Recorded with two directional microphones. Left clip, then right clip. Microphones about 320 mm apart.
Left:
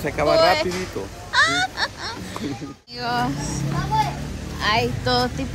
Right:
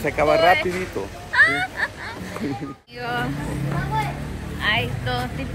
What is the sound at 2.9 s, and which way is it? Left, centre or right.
Speech, centre.